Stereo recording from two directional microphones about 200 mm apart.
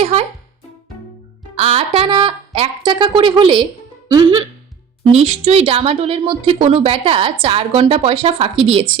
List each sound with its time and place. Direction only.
0.0 s music: 30° right (ahead or behind)
1.5 s a woman's voice: 30° right (ahead or behind)